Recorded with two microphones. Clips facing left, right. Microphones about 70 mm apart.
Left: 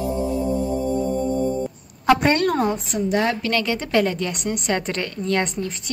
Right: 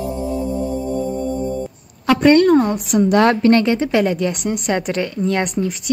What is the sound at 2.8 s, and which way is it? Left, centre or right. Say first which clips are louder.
Speech: right 7 dB; right.